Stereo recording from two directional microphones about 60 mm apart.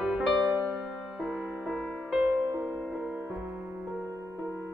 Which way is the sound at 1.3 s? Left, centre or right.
Centre.